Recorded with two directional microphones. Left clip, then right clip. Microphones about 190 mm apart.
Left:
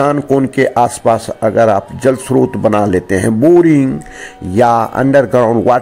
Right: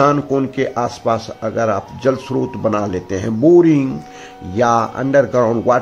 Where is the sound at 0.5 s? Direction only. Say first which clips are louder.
Left 8 dB; 35° left (ahead or behind).